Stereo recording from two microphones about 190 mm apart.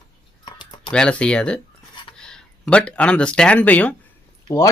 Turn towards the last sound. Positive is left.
turn(degrees=15)  # may be behind; listen again after turning